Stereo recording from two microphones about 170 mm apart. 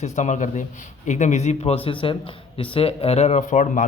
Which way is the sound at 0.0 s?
45° left (ahead or behind).